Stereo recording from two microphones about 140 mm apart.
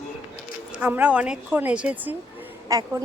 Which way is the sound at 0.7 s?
10° right (ahead or behind).